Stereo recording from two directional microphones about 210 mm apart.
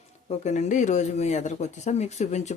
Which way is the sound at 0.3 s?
35° left (ahead or behind).